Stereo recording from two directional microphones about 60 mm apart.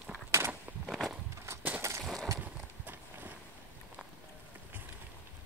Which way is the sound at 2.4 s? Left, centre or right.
Right.